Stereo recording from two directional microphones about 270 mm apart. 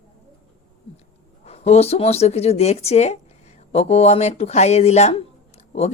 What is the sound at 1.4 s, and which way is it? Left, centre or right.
Speech, left.